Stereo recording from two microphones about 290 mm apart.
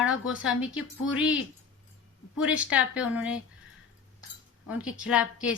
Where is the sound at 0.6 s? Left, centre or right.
Left.